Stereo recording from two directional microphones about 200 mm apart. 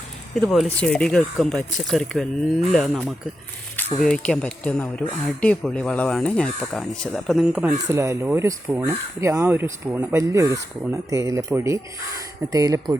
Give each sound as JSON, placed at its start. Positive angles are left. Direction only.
{"t": 0.3, "sound": "speech", "side_deg": 0}